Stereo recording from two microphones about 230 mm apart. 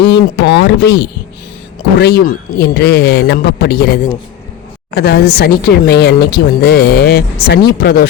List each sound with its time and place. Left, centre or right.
0.0 s speech: left